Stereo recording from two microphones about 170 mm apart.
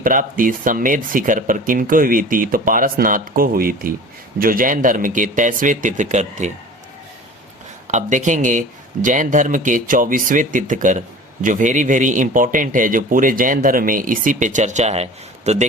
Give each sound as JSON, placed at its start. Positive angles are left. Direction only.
{"t": 0.0, "sound": "a man's voice", "side_deg": -55}
{"t": 7.9, "sound": "a man's voice", "side_deg": -45}